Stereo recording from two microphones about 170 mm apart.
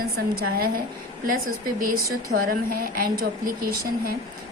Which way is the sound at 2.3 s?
55° right (ahead or behind).